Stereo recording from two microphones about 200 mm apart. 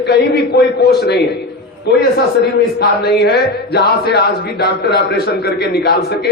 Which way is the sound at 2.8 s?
55° left (ahead or behind).